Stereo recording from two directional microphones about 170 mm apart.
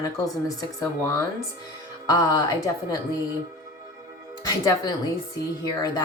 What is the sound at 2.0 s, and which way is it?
Speech, 20° left (ahead or behind).